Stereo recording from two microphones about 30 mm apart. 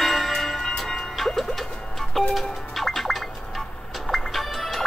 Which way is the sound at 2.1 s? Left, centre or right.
Centre.